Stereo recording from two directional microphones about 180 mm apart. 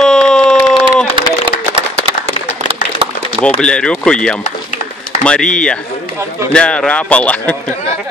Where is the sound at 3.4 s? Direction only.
5° left (ahead or behind).